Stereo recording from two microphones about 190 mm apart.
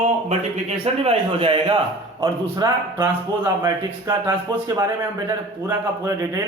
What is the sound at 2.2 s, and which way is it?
A man's voice, 15° right (ahead or behind).